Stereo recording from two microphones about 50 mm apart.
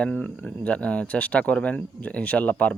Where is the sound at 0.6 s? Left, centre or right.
Left.